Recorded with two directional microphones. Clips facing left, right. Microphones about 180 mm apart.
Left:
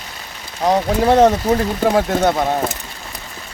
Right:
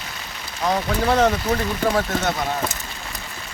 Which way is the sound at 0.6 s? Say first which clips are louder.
Left 6 dB; 35° left (ahead or behind).